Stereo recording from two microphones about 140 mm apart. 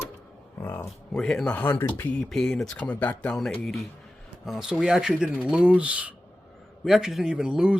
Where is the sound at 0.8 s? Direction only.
5° left (ahead or behind).